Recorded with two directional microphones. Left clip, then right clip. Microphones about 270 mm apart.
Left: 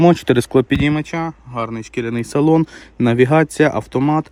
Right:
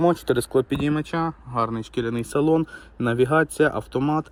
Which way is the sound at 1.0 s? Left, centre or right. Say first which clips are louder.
Left 3 dB; centre.